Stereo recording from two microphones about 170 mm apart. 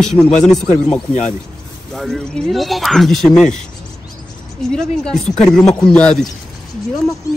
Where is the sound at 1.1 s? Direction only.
45° left (ahead or behind).